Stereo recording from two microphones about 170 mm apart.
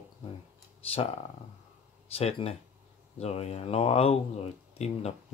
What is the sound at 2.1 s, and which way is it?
Speech, 35° left (ahead or behind).